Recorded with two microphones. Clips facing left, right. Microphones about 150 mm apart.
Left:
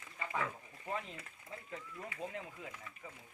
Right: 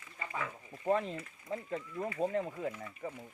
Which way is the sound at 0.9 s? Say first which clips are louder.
Right 11 dB; 55° right (ahead or behind).